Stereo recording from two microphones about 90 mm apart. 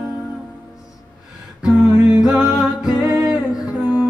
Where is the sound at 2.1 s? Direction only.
5° right (ahead or behind).